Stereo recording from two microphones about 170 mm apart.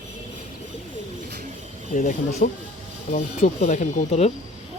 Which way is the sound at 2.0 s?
55° left (ahead or behind).